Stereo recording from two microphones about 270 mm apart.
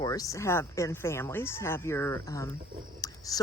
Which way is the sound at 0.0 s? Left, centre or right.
Centre.